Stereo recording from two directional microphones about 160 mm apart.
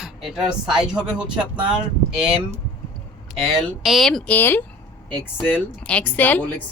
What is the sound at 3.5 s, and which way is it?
A woman's voice, centre (ahead or behind).